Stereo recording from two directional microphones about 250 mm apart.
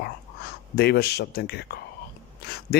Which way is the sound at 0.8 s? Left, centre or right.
Left.